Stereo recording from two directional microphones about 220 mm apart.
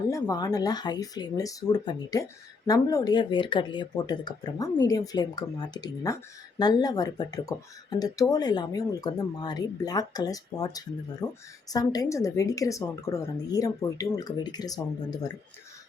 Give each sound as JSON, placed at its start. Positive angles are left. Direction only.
{"t": 0.1, "sound": "speech", "side_deg": 15}